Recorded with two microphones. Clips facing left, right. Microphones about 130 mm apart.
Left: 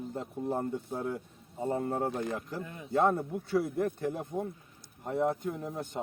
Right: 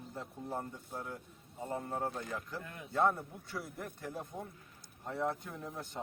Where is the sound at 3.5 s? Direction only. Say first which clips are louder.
Left 15 dB; 55° left (ahead or behind).